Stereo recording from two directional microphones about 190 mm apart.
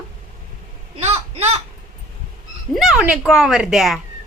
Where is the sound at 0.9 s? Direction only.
35° right (ahead or behind).